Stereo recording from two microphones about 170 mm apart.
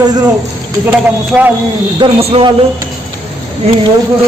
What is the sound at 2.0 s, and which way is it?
Speech, 35° right (ahead or behind).